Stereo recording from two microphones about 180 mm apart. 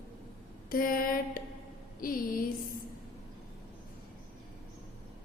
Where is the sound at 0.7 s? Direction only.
50° left (ahead or behind).